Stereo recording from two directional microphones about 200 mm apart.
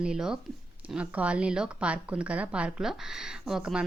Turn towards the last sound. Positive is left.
turn(degrees=-5)  # may be behind; listen again after turning